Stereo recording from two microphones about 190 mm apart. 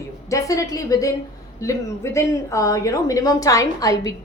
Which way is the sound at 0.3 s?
15° left (ahead or behind).